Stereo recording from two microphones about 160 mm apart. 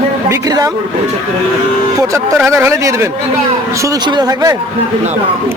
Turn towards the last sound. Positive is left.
turn(degrees=-25)  # may be behind; listen again after turning